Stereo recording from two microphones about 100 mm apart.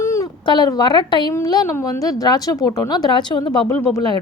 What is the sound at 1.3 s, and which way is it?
A woman's voice, 35° left (ahead or behind).